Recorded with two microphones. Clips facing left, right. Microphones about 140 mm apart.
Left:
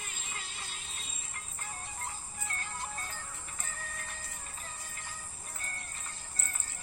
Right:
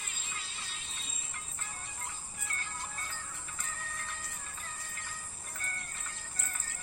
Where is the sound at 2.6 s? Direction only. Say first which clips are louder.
Left 2 dB; 35° left (ahead or behind).